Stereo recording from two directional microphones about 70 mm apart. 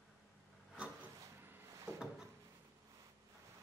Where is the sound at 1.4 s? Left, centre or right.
Right.